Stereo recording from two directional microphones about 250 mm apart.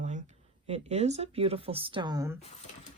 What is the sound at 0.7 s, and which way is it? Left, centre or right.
Speech, right.